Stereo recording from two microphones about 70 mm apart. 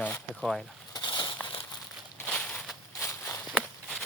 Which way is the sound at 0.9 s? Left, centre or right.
Left.